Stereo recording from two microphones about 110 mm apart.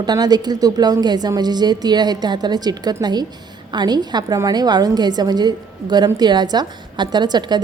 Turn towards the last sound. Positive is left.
turn(degrees=-40)  # may be behind; listen again after turning